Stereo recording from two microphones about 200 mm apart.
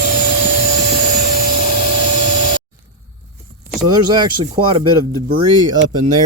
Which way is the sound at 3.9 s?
20° right (ahead or behind).